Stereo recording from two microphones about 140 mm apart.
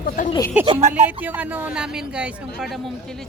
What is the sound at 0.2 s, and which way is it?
Speech, 80° left.